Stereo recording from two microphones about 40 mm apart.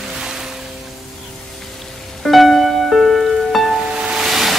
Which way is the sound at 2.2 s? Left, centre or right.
Centre.